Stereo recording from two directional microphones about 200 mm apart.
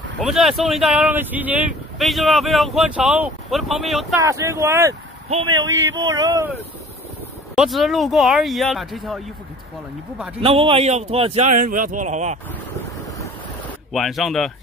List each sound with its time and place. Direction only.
0.2 s speech: centre (ahead or behind)
4.2 s speech: 15° right (ahead or behind)
5.3 s a man's voice: 25° right (ahead or behind)
7.5 s speech: centre (ahead or behind)
10.4 s a man's voice: 25° right (ahead or behind)
13.9 s speech: centre (ahead or behind)